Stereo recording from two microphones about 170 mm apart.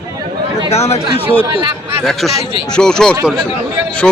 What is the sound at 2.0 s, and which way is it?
Speech, centre (ahead or behind).